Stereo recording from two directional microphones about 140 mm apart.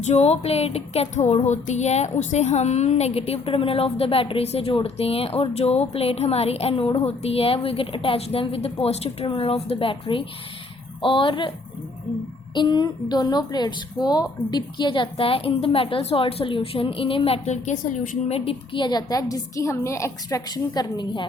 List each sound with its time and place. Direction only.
0.0 s music: 55° left (ahead or behind)
11.0 s a woman's voice: 40° left (ahead or behind)
12.5 s a woman's voice: 30° left (ahead or behind); by 18.2 s 65° left (ahead or behind)
18.3 s a woman's voice: 45° left (ahead or behind)